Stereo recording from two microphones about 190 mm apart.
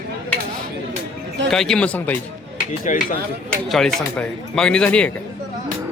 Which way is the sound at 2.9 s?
40° left (ahead or behind).